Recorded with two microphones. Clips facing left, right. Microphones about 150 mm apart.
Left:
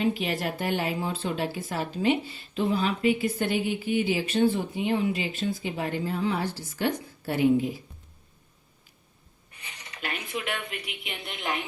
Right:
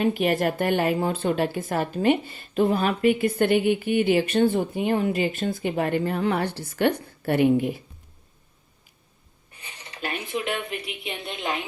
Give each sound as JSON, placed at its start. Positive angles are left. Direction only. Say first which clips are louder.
{"t": 0.0, "sound": "a woman's voice", "louder": "right 5 dB", "side_deg": -55}
{"t": 9.5, "sound": "speech", "louder": "right 2 dB", "side_deg": -30}